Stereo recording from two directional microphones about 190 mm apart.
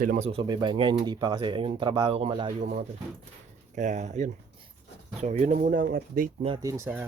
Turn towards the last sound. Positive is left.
turn(degrees=-10)  # may be behind; listen again after turning